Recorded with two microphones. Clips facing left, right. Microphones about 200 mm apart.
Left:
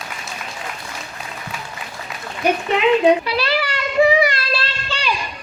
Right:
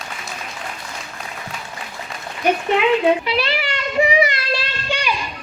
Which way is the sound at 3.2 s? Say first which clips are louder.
Left 1 dB; 20° right (ahead or behind).